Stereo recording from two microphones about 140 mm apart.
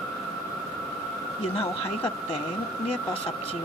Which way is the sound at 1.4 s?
45° left (ahead or behind).